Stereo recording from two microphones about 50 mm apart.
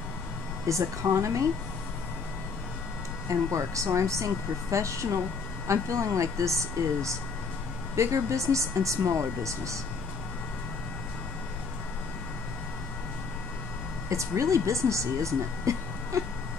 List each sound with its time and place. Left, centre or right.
0.7 s speech: right
3.3 s speech: right
14.0 s speech: right